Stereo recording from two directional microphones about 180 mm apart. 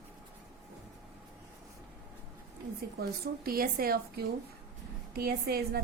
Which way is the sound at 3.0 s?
55° right (ahead or behind).